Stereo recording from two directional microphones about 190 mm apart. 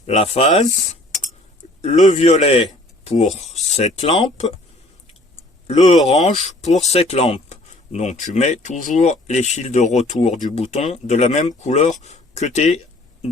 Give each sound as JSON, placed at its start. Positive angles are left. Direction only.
{"t": 0.0, "sound": "speech", "side_deg": 35}
{"t": 1.8, "sound": "speech", "side_deg": 35}
{"t": 5.6, "sound": "speech", "side_deg": 35}